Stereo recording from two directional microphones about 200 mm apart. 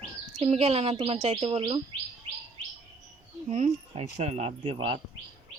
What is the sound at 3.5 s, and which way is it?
Speech, 30° right (ahead or behind).